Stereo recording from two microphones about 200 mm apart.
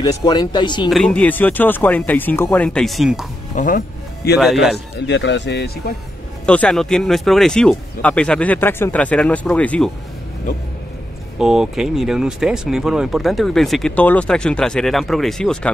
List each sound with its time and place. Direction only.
0.0 s speech: 20° left (ahead or behind)
0.8 s speech: 5° left (ahead or behind)
3.5 s music: 40° left (ahead or behind)
4.4 s speech: centre (ahead or behind)
4.9 s speech: 60° left (ahead or behind)
6.4 s speech: 5° left (ahead or behind)
11.3 s speech: 5° right (ahead or behind)